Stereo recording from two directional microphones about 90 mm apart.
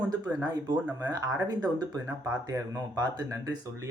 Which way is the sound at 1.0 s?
40° right (ahead or behind).